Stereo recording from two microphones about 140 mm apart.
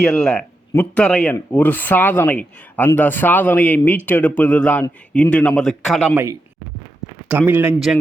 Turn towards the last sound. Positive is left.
turn(degrees=-15)  # may be behind; listen again after turning